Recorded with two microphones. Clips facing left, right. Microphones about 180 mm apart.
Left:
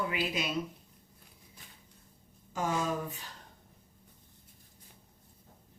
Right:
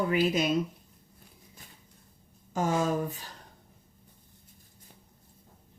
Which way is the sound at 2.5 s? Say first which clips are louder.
Right 5 dB; 45° right (ahead or behind).